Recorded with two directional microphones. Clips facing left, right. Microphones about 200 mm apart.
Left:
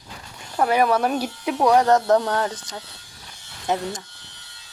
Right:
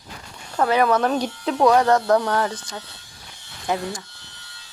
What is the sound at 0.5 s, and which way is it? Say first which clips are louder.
Speech: even; 15° left (ahead or behind).